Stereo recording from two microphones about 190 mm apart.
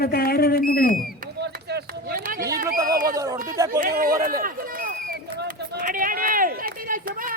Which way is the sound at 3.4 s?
15° right (ahead or behind).